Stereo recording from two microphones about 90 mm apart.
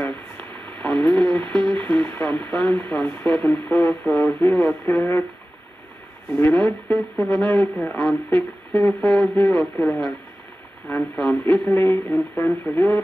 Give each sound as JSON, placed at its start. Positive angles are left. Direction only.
{"t": 0.0, "sound": "a sound", "side_deg": 15}
{"t": 4.5, "sound": "speech", "side_deg": 15}
{"t": 6.4, "sound": "speech", "side_deg": 15}
{"t": 11.1, "sound": "speech", "side_deg": 10}
{"t": 11.7, "sound": "speech", "side_deg": 25}